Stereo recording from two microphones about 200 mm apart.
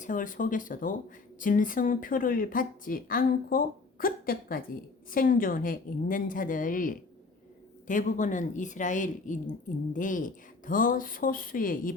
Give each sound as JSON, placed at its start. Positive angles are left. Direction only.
{"t": 0.0, "sound": "a woman's voice", "side_deg": 40}